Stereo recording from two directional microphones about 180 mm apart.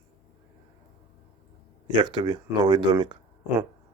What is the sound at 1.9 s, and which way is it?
Speech, 25° right (ahead or behind).